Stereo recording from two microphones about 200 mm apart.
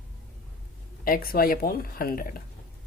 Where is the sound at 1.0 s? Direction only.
50° left (ahead or behind).